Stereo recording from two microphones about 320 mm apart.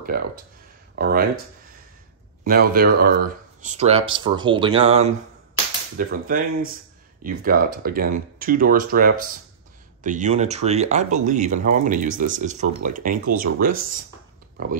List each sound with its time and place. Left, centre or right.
0.1 s speech: right
2.4 s speech: right